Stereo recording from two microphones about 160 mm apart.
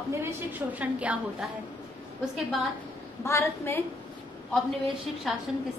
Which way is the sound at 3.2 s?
20° left (ahead or behind).